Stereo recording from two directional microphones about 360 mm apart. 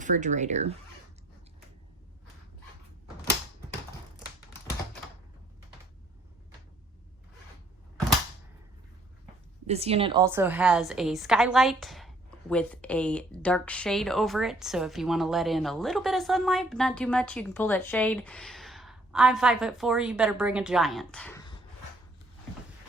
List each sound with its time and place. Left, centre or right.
0.0 s speech: centre
9.6 s a woman's voice: centre